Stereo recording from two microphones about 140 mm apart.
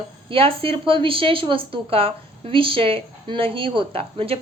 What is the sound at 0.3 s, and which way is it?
A woman's voice, 40° right (ahead or behind).